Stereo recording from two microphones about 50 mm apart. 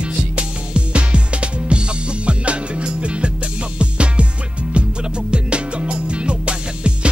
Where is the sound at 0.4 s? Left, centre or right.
Right.